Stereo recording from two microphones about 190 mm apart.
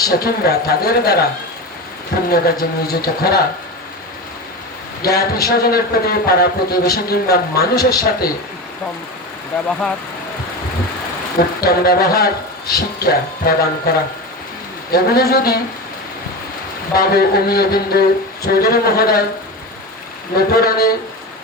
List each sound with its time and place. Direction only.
0.1 s a man's voice: 55° left (ahead or behind)
2.3 s speech: 55° left (ahead or behind)
5.0 s a man's voice: 55° left (ahead or behind)
11.3 s speech: 55° left (ahead or behind)
14.9 s a man's voice: 55° left (ahead or behind)
16.9 s speech: 55° left (ahead or behind)
20.3 s speech: 55° left (ahead or behind)